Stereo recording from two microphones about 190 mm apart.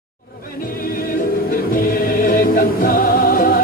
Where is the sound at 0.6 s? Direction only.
50° left (ahead or behind).